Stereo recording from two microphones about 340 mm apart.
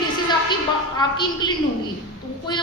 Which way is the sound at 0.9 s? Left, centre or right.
Centre.